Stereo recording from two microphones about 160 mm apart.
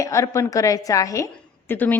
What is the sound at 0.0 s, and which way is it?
A woman's voice, 20° left (ahead or behind).